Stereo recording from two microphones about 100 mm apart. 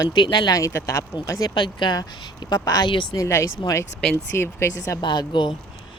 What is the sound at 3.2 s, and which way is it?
Speech, 30° left (ahead or behind).